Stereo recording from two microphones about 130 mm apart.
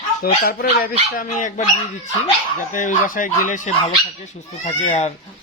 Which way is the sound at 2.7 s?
80° left.